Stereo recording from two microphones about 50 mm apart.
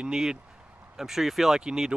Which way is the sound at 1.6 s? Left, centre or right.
Centre.